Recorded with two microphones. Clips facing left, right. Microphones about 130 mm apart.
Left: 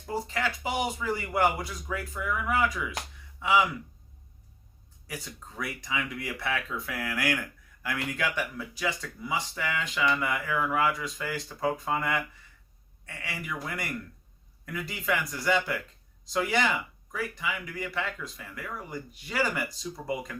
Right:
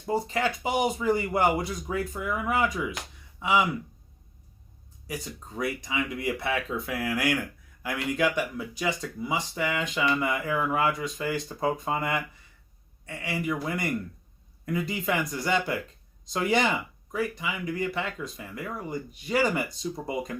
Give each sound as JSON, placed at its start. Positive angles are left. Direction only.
{"t": 0.0, "sound": "speech", "side_deg": -25}
{"t": 5.5, "sound": "speech", "side_deg": -20}
{"t": 13.4, "sound": "speech", "side_deg": -25}